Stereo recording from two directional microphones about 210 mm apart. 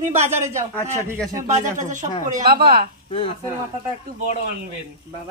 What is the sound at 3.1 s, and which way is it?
Speech, 25° left (ahead or behind).